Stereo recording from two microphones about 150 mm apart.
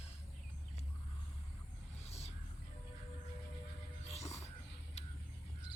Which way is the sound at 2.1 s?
45° left (ahead or behind).